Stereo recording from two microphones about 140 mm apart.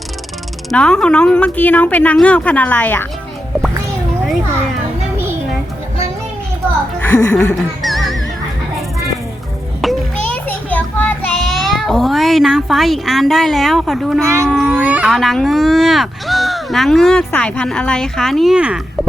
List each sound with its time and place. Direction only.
0.7 s a woman's voice: 5° left (ahead or behind)
7.0 s a woman's voice: 15° left (ahead or behind)
7.8 s music: centre (ahead or behind)
9.8 s children playing: centre (ahead or behind)
10.3 s children playing: 10° left (ahead or behind)
11.3 s child singing: centre (ahead or behind)
11.7 s speech: centre (ahead or behind)
14.2 s speech: 20° right (ahead or behind)
14.4 s speech: 5° left (ahead or behind)
14.7 s speech: 10° right (ahead or behind)